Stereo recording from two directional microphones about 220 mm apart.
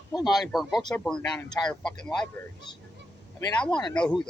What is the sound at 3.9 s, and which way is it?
Speech, 5° left (ahead or behind).